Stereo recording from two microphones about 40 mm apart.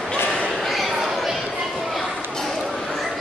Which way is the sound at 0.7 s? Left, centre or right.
Centre.